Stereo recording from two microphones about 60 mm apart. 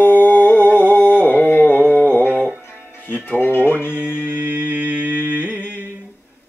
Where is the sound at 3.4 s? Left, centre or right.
Left.